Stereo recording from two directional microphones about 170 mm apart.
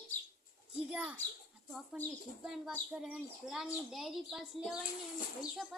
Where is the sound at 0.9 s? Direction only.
5° right (ahead or behind).